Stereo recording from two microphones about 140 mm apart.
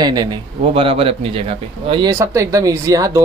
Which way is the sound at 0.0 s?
30° right (ahead or behind).